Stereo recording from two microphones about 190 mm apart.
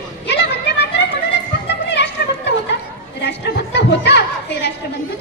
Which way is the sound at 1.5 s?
60° left (ahead or behind).